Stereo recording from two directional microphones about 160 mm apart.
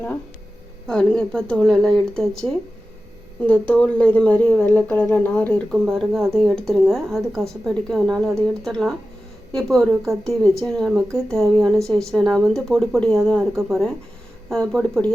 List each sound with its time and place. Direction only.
0.9 s speech: 5° left (ahead or behind)
9.5 s speech: centre (ahead or behind)